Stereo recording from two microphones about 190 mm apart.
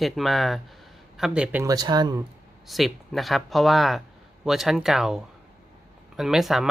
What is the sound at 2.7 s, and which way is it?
Speech, centre (ahead or behind).